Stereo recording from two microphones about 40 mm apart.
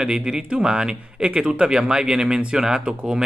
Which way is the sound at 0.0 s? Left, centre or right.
Right.